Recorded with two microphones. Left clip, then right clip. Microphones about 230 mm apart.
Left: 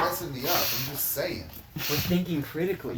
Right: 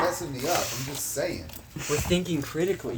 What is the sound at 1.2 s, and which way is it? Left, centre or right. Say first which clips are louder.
Speech: right 1 dB; right.